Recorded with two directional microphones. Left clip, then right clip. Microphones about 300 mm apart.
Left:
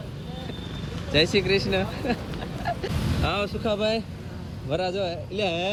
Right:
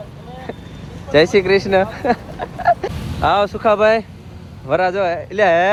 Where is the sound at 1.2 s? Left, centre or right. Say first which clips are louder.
Right 9 dB; centre.